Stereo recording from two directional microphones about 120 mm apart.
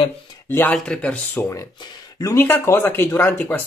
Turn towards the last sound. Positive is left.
turn(degrees=15)  # may be behind; listen again after turning